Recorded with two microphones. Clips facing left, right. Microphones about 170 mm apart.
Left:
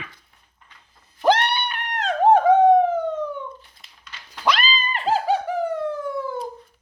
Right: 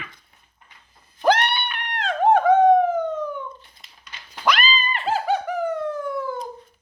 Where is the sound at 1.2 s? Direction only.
30° left (ahead or behind).